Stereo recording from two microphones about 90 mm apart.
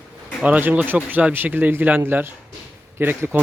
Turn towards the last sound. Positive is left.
turn(degrees=-25)  # may be behind; listen again after turning